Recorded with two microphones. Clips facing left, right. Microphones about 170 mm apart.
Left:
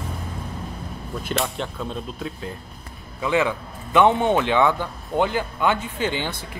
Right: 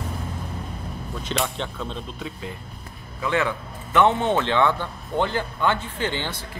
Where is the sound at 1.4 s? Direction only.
5° left (ahead or behind).